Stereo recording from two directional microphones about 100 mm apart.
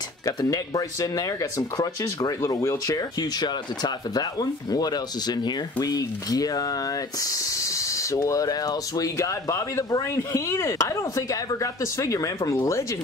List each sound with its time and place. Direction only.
0.4 s speech: 40° left (ahead or behind)
3.3 s speech: 45° left (ahead or behind)